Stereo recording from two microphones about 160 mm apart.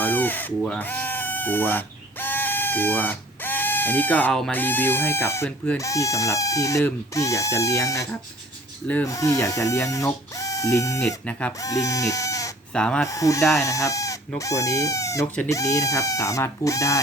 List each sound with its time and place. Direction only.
0.0 s speech: 10° left (ahead or behind)
9.0 s speech: 20° left (ahead or behind)
12.7 s speech: 5° left (ahead or behind)
13.1 s speech: 20° left (ahead or behind)